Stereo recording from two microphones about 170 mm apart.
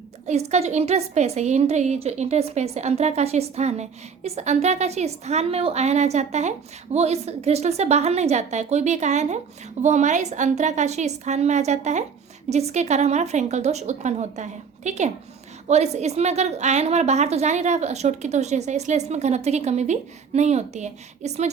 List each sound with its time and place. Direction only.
0.3 s a woman's voice: 40° right (ahead or behind)